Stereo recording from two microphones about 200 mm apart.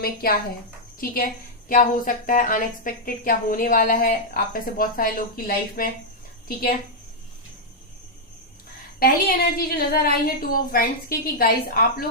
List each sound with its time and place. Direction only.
0.0 s a woman's voice: 50° left (ahead or behind)
9.0 s a woman's voice: 45° left (ahead or behind)